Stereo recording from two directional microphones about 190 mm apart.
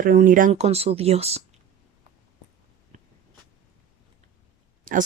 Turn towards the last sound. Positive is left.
turn(degrees=-45)  # may be behind; listen again after turning